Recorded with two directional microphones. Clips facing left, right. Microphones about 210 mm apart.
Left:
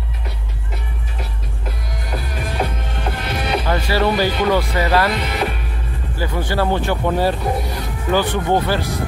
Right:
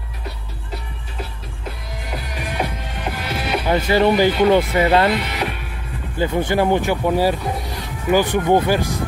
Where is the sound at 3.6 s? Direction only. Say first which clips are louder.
Right 5 dB; 20° right (ahead or behind).